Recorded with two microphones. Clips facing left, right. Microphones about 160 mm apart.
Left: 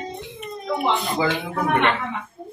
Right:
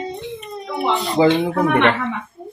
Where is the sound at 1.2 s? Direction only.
25° right (ahead or behind).